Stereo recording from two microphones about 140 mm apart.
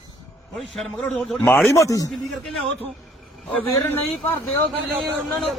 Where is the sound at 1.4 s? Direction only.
15° left (ahead or behind).